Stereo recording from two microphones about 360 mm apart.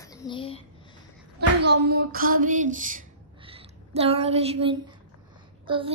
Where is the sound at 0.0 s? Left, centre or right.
Centre.